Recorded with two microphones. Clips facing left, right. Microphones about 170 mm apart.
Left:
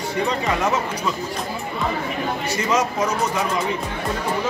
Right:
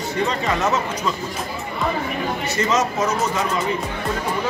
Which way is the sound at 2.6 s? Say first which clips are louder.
Right 1 dB; 10° left (ahead or behind).